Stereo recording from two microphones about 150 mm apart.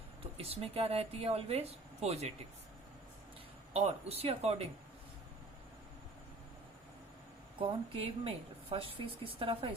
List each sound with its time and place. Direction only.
0.3 s speech: 40° right (ahead or behind)
3.7 s speech: 45° right (ahead or behind)
7.6 s speech: 35° right (ahead or behind)